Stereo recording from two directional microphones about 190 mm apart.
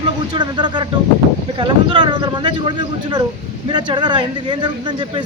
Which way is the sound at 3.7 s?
25° right (ahead or behind).